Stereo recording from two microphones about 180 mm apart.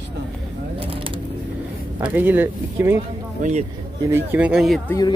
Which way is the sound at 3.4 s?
40° right (ahead or behind).